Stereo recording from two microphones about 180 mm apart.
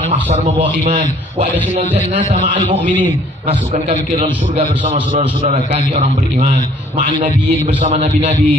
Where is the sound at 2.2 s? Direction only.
40° right (ahead or behind).